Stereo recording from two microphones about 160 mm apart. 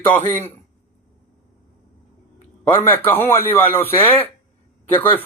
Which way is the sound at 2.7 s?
15° left (ahead or behind).